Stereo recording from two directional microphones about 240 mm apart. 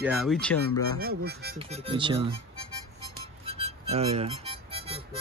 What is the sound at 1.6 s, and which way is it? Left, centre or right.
Speech, right.